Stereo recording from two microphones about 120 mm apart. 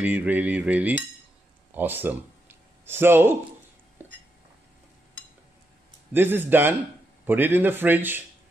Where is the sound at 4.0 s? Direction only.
15° right (ahead or behind).